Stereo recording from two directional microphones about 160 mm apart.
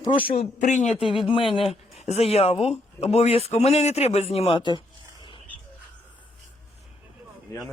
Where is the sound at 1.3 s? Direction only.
35° left (ahead or behind).